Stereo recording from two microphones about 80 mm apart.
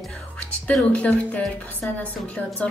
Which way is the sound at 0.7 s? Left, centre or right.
Centre.